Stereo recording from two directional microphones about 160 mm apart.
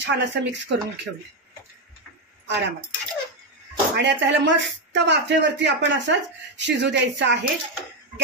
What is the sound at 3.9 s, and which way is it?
Speech, 90° right.